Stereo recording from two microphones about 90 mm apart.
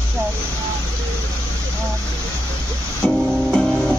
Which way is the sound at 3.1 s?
5° right (ahead or behind).